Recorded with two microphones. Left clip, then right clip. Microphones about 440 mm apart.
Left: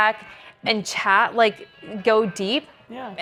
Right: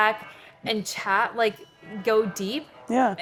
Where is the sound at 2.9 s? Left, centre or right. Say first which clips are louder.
Right 17 dB; right.